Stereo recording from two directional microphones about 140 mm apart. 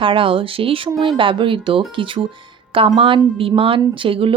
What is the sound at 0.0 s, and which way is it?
Speech, 40° right (ahead or behind).